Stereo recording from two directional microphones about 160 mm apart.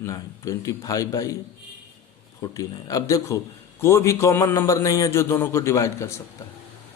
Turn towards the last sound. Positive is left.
turn(degrees=20)  # may be behind; listen again after turning